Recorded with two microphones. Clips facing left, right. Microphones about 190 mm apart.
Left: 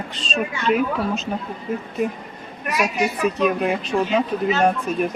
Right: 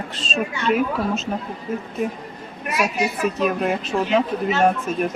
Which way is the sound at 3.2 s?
Centre (ahead or behind).